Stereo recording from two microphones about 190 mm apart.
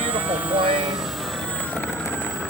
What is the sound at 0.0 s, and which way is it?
Vehicle, 10° right (ahead or behind).